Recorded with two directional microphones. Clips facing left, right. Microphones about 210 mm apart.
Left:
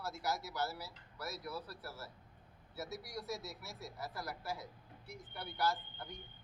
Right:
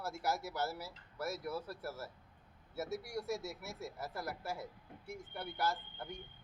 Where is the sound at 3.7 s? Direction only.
25° right (ahead or behind).